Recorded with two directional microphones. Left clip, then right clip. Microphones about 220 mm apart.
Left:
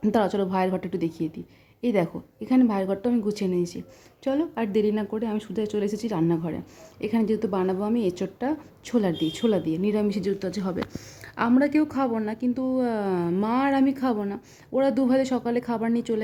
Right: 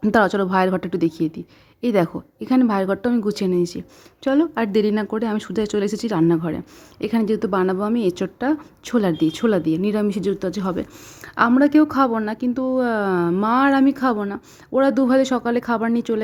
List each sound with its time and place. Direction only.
0.0 s a woman's voice: 20° right (ahead or behind)